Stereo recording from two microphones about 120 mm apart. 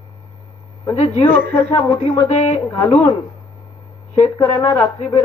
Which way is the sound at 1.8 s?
35° left (ahead or behind).